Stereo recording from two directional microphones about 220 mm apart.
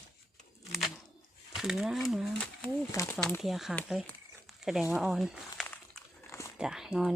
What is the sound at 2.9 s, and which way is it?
Speech, 15° left (ahead or behind).